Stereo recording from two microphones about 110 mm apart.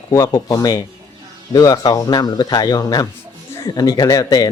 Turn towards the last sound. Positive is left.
turn(degrees=30)  # may be behind; listen again after turning